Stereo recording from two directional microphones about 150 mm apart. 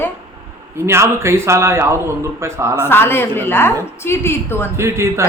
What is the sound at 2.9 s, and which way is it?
A woman's voice, 15° left (ahead or behind).